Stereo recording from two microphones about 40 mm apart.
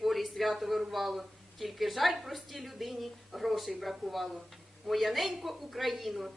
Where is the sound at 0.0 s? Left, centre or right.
Centre.